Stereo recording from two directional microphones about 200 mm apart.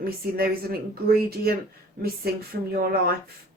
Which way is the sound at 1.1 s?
50° right (ahead or behind).